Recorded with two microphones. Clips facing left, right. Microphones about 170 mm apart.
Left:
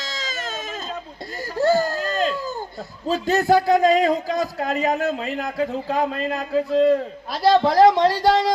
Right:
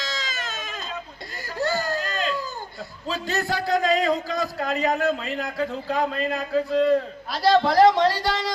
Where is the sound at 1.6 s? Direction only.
45° left (ahead or behind).